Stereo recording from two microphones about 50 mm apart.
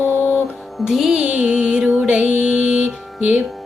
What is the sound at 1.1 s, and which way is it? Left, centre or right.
Music, right.